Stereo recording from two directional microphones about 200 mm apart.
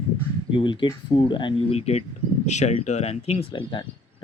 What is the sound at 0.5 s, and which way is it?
Speech, 25° left (ahead or behind).